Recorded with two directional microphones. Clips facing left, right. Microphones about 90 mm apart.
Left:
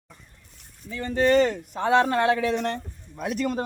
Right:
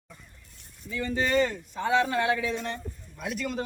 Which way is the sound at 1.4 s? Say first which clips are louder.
Left 4 dB; 70° left (ahead or behind).